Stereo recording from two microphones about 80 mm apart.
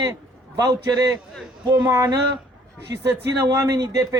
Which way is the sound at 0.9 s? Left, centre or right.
Right.